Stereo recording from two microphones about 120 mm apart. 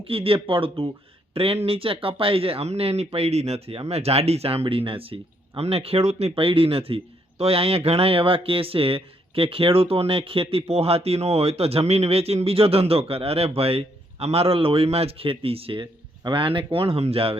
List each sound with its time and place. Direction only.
0.0 s speech: 50° right (ahead or behind)